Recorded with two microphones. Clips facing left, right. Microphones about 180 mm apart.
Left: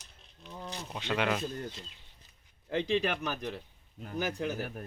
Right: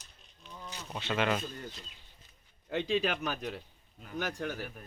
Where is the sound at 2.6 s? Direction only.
Centre (ahead or behind).